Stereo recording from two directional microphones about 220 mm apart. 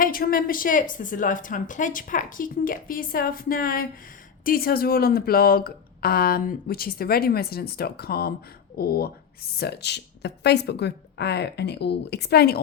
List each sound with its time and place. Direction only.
0.0 s a woman's voice: 40° left (ahead or behind)